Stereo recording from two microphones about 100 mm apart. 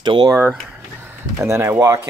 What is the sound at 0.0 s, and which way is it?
Speech, 50° right (ahead or behind).